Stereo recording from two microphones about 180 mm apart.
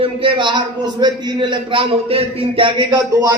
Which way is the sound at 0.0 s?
30° right (ahead or behind).